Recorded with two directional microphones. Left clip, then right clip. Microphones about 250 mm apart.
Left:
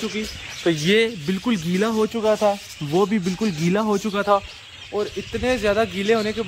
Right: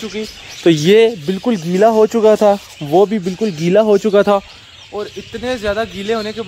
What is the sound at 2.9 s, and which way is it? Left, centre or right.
A man's voice, centre.